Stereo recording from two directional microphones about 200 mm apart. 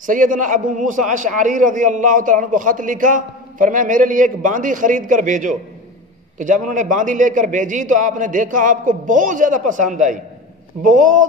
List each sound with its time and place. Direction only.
0.0 s a man's voice: 40° right (ahead or behind)